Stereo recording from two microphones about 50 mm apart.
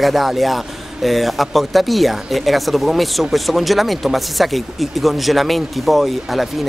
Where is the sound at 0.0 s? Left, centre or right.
Centre.